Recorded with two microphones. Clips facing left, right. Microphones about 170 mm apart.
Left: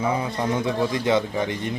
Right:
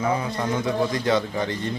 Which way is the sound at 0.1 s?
25° left (ahead or behind).